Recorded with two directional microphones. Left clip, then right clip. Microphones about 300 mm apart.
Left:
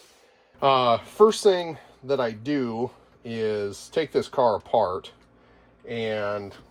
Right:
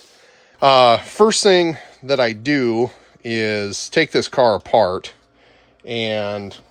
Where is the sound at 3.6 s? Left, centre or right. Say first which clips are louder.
Right 8 dB; right.